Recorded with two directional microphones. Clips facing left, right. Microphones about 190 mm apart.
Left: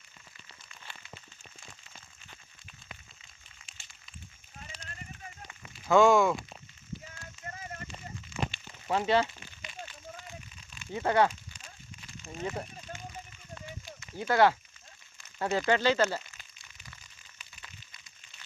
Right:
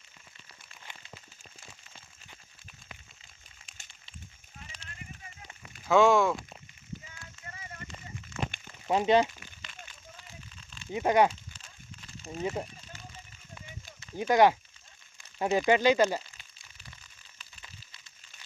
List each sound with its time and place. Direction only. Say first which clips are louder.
5.9 s speech: even; centre (ahead or behind)
8.9 s speech: right 3 dB; 20° right (ahead or behind)
10.9 s speech: right 2 dB; 15° right (ahead or behind)
12.2 s speech: right 4 dB; 35° right (ahead or behind)
14.2 s speech: right 2 dB; 15° right (ahead or behind)